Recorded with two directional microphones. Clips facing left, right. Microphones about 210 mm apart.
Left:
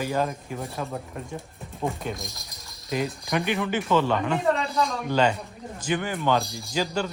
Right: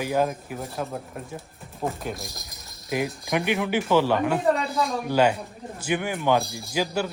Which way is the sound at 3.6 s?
Centre (ahead or behind).